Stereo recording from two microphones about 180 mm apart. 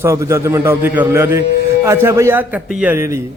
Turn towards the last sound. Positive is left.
turn(degrees=-10)  # may be behind; listen again after turning